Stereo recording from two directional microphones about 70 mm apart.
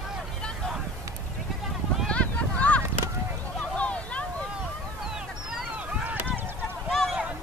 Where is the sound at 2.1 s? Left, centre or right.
Centre.